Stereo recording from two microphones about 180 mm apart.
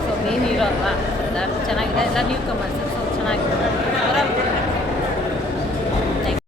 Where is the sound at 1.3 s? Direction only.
Centre (ahead or behind).